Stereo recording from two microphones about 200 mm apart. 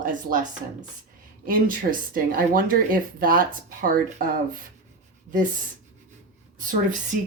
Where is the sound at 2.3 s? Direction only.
45° right (ahead or behind).